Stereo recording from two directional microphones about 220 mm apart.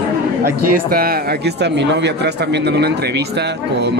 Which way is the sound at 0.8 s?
40° right (ahead or behind).